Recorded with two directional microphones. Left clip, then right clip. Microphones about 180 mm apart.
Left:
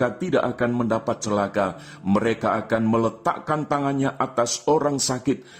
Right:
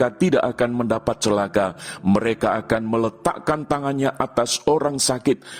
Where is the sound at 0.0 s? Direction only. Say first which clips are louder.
Right 3 dB; 45° right (ahead or behind).